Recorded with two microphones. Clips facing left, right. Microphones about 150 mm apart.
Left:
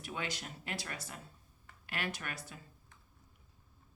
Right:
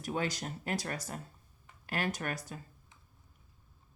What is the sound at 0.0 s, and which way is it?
Speech, 40° right (ahead or behind).